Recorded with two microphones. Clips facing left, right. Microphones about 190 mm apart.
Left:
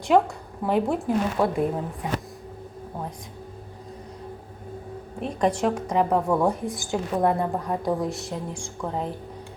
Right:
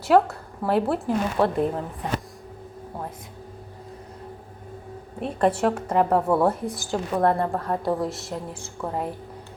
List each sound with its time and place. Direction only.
0.1 s a woman's voice: 5° right (ahead or behind)
5.2 s a woman's voice: 5° right (ahead or behind)
7.2 s a woman's voice: 15° left (ahead or behind)
7.9 s a woman's voice: centre (ahead or behind)